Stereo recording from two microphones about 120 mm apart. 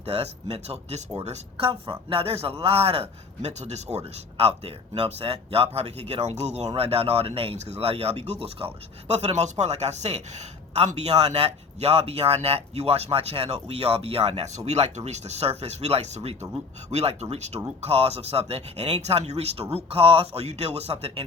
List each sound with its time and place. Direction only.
0.0 s a man's voice: 60° right (ahead or behind)
1.5 s a man's voice: 45° right (ahead or behind); by 19.6 s 65° right (ahead or behind)
19.7 s a man's voice: 50° right (ahead or behind)